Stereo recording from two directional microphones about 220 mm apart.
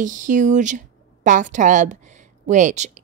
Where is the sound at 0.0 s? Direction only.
35° right (ahead or behind).